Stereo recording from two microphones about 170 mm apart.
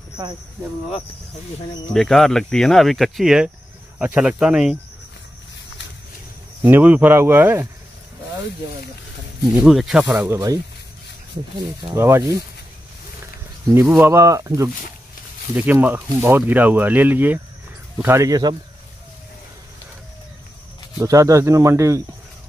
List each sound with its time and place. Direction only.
2.0 s speech: centre (ahead or behind)
6.6 s speech: 10° right (ahead or behind)
9.6 s speech: centre (ahead or behind)
11.5 s speech: 20° right (ahead or behind)
13.7 s speech: 10° right (ahead or behind)
21.0 s speech: 20° right (ahead or behind)